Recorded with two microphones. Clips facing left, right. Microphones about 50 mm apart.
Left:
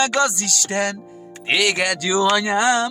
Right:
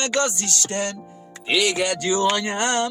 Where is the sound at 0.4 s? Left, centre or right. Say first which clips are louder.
Left 3 dB; left.